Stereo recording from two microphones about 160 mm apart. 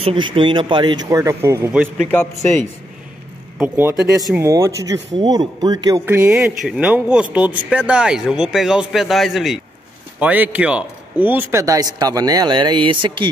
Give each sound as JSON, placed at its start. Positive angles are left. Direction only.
{"t": 0.0, "sound": "a man's voice", "side_deg": -35}
{"t": 3.5, "sound": "a man's voice", "side_deg": -10}
{"t": 6.0, "sound": "a man's voice", "side_deg": -15}